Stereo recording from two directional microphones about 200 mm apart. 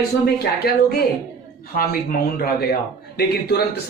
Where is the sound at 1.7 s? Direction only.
45° left (ahead or behind).